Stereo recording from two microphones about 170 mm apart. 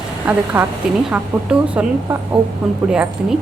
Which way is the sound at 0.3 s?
10° right (ahead or behind).